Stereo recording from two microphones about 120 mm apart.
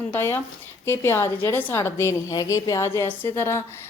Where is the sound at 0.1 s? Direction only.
20° left (ahead or behind).